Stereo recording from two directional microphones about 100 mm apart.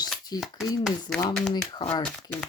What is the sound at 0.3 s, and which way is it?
Speech, centre (ahead or behind).